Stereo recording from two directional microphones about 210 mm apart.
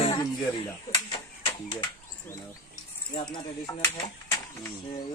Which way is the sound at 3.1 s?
20° left (ahead or behind).